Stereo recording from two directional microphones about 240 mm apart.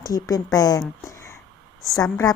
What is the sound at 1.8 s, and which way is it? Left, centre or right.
Speech, centre.